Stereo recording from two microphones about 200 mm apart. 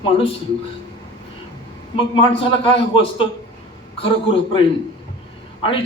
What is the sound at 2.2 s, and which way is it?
A man's voice, 25° left (ahead or behind).